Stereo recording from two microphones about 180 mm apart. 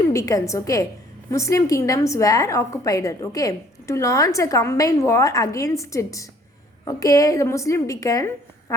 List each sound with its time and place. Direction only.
0.1 s a woman's voice: 20° left (ahead or behind)